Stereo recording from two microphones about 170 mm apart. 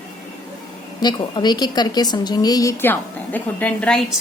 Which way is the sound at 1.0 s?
25° left (ahead or behind).